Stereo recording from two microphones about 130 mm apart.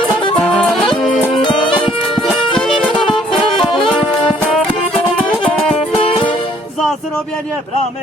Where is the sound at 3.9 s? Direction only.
5° left (ahead or behind).